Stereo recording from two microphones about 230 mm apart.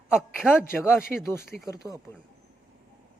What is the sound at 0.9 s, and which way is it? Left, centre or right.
Speech, centre.